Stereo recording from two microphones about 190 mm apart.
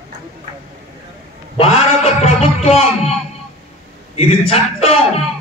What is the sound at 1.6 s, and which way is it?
A woman's voice, 35° left (ahead or behind).